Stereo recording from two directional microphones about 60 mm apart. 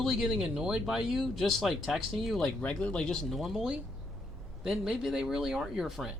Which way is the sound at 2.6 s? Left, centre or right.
Centre.